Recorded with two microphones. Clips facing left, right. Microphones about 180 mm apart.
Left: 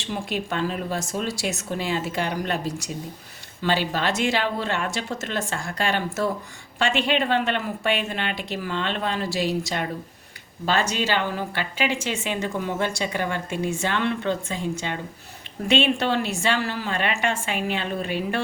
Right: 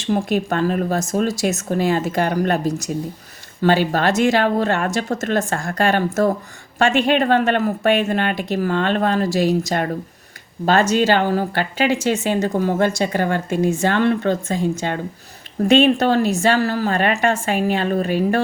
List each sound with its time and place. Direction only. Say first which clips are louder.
0.0 s speech: right 9 dB; 45° right (ahead or behind)